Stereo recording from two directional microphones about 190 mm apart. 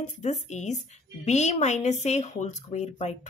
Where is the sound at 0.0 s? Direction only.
40° left (ahead or behind).